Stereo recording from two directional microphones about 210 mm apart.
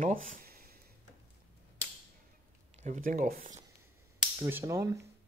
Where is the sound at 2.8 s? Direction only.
40° right (ahead or behind).